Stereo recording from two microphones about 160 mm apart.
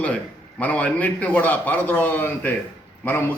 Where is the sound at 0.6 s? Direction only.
10° left (ahead or behind).